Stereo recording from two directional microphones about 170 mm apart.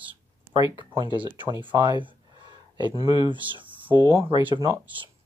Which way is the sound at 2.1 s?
25° right (ahead or behind).